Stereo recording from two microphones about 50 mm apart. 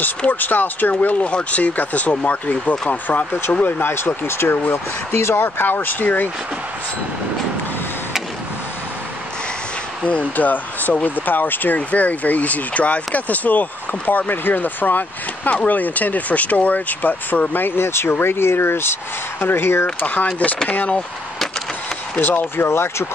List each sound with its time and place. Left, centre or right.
0.3 s speech: left
3.8 s speech: left
10.0 s speech: left
20.1 s speech: left
22.2 s speech: left
22.7 s speech: left